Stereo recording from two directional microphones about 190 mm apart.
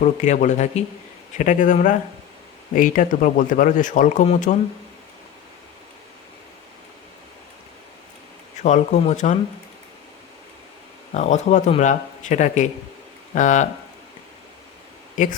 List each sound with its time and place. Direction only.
0.0 s speech: 40° left (ahead or behind)
8.5 s speech: 35° left (ahead or behind)
11.1 s speech: 40° left (ahead or behind)